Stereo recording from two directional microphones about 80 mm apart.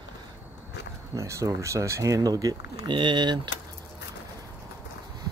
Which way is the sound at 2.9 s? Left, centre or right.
Right.